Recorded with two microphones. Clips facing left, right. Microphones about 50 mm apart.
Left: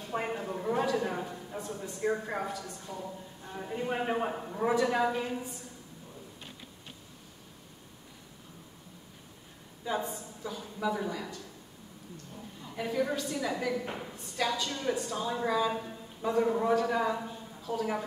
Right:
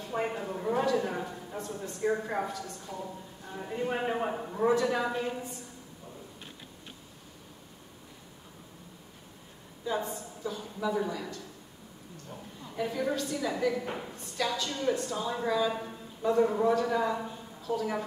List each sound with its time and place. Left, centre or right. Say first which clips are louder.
0.1 s a sound: right 1 dB; centre
1.7 s a man's voice: right 1 dB; centre
3.0 s a man's voice: right 1 dB; centre
4.6 s speech: even; centre
9.9 s a woman's voice: even; centre
12.8 s a man's voice: left 1 dB; centre
13.1 s speech: right 1 dB; centre
13.7 s a man's voice: right 1 dB; centre
14.3 s a man's voice: even; centre
15.7 s a sound: even; centre
16.8 s a man's voice: right 1 dB; centre
17.7 s a woman's voice: right 2 dB; left